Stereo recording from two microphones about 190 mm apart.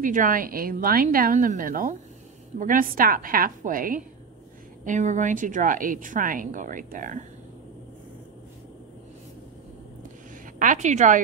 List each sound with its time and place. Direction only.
0.0 s a woman's voice: 45° right (ahead or behind)
10.4 s a woman's voice: 45° right (ahead or behind)